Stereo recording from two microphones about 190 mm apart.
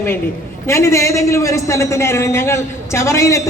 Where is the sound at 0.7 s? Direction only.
15° left (ahead or behind).